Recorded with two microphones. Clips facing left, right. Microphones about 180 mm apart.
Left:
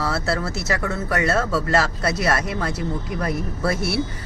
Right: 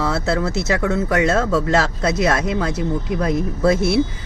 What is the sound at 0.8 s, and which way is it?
Speech, 15° right (ahead or behind).